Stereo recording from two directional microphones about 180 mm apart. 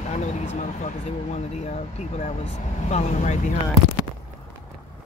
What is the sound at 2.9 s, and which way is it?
Speech, 40° left (ahead or behind).